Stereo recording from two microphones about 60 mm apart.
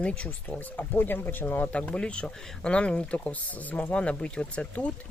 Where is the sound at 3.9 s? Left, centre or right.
Centre.